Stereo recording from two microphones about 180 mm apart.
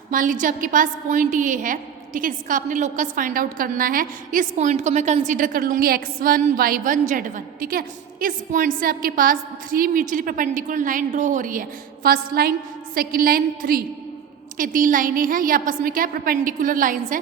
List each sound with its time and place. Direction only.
0.1 s a woman's voice: 45° right (ahead or behind)